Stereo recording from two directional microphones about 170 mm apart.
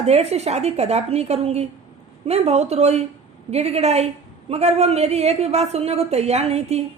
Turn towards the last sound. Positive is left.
turn(degrees=-40)  # may be behind; listen again after turning